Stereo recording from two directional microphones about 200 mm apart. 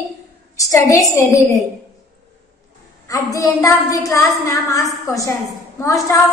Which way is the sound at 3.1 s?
15° left (ahead or behind).